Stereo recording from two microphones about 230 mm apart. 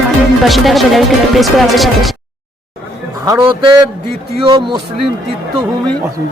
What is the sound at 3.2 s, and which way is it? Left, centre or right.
A man's voice, centre.